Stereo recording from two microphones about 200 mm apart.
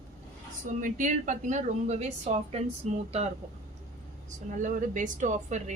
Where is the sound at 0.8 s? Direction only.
40° right (ahead or behind).